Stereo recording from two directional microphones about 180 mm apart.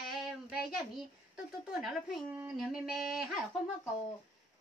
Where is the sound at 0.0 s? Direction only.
Centre (ahead or behind).